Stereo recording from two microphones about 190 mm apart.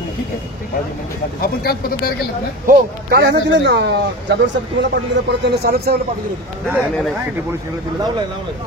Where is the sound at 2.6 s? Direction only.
55° right (ahead or behind).